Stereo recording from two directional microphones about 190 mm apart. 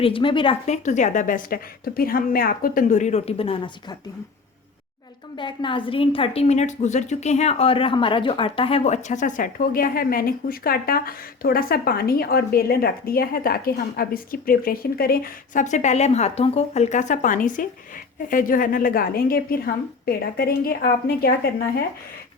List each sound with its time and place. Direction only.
0.0 s a woman's voice: 25° left (ahead or behind)
0.9 s a woman's voice: 40° left (ahead or behind)
5.4 s a woman's voice: 25° left (ahead or behind); by 21.3 s 50° left (ahead or behind)